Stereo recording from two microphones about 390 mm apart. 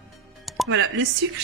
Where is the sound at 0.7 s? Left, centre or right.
Right.